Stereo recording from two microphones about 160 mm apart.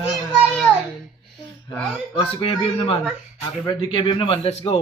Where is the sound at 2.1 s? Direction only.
35° left (ahead or behind).